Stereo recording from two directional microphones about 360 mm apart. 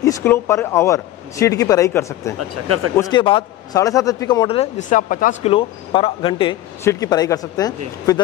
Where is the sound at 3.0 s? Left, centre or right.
Centre.